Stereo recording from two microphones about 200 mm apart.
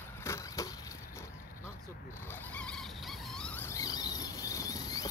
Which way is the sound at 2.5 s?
5° left (ahead or behind).